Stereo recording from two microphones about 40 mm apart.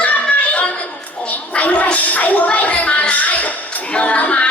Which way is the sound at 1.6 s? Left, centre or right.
Left.